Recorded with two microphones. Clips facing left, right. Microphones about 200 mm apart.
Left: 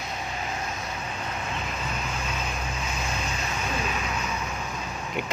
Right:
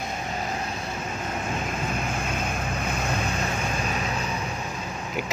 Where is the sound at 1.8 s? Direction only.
50° right (ahead or behind).